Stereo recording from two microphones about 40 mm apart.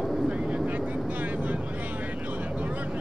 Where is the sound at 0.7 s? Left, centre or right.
Right.